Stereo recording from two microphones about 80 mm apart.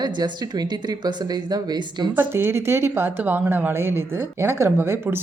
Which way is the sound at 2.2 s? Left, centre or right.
Right.